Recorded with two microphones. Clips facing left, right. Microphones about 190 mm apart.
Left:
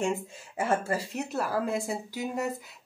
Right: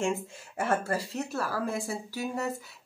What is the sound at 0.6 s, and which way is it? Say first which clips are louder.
Speech: left 1 dB; 10° left (ahead or behind).